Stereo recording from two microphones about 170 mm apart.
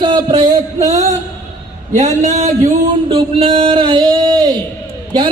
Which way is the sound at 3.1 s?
30° right (ahead or behind).